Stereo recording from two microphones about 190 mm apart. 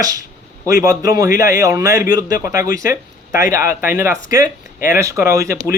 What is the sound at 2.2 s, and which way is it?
Speech, 50° left (ahead or behind).